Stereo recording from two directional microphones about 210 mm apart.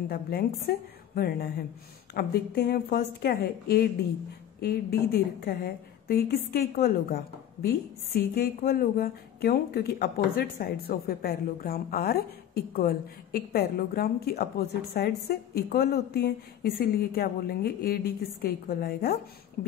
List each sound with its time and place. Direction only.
0.1 s a woman's voice: 45° left (ahead or behind)